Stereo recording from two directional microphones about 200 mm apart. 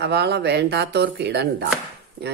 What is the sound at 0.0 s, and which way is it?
Speech, 55° right (ahead or behind).